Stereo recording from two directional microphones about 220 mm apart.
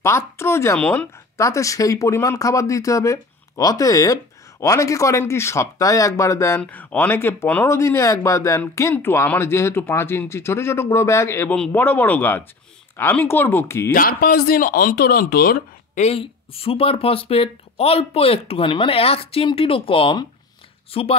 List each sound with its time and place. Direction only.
0.0 s speech: 10° left (ahead or behind)
13.9 s a man's voice: 40° left (ahead or behind); by 21.2 s 25° left (ahead or behind)